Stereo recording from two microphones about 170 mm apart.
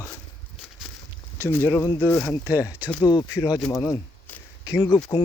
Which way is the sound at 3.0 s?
25° left (ahead or behind).